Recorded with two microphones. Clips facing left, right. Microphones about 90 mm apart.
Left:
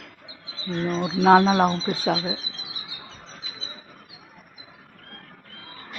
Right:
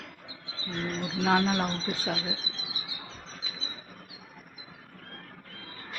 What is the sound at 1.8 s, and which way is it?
Speech, 50° left (ahead or behind).